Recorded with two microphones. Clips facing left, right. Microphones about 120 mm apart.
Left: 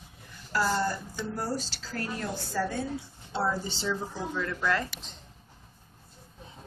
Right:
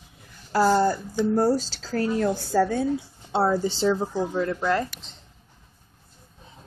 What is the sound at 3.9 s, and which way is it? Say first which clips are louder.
Speech: right 8 dB; 40° right (ahead or behind).